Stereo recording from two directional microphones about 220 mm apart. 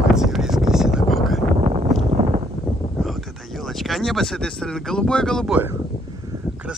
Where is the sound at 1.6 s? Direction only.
25° right (ahead or behind).